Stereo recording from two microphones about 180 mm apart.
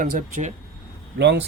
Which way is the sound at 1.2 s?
70° right (ahead or behind).